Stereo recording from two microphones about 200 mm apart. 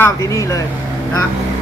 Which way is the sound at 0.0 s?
15° left (ahead or behind).